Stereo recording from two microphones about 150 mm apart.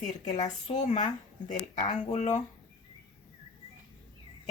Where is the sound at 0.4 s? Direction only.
50° left (ahead or behind).